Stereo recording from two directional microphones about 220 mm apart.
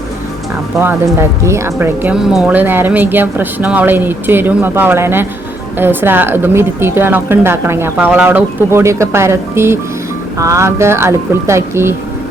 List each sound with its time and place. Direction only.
0.8 s speech: 10° right (ahead or behind)